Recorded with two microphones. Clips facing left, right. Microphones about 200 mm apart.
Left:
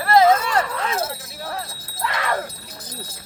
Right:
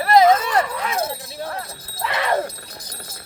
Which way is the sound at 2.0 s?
20° right (ahead or behind).